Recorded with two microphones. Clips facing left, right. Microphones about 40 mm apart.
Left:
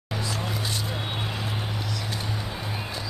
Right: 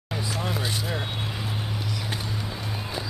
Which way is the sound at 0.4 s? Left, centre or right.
Centre.